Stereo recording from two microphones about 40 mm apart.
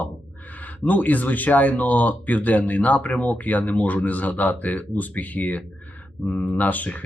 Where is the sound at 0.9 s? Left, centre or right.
Left.